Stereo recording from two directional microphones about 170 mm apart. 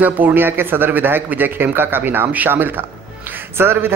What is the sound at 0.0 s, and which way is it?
A man's voice, 10° right (ahead or behind).